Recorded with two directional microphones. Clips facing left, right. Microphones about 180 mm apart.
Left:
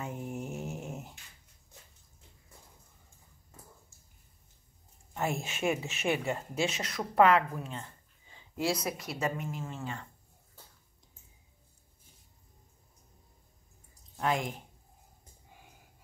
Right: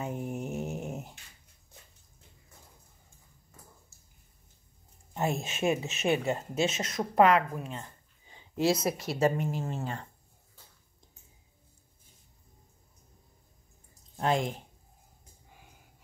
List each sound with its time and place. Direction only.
0.0 s mantra: 20° right (ahead or behind)
5.1 s speech: 20° right (ahead or behind); by 10.0 s 40° right (ahead or behind)
14.1 s speech: 30° right (ahead or behind)